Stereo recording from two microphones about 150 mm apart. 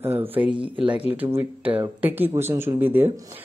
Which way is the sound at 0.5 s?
35° right (ahead or behind).